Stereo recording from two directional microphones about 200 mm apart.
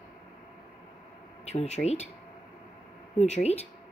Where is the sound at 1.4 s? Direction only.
35° left (ahead or behind).